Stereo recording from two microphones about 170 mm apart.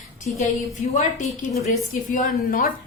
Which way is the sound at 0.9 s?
45° left (ahead or behind).